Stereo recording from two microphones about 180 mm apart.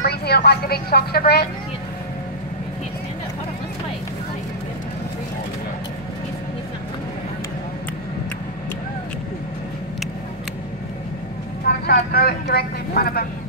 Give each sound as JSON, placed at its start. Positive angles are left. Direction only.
{"t": 0.0, "sound": "a woman's voice", "side_deg": 65}
{"t": 11.8, "sound": "a woman's voice", "side_deg": 60}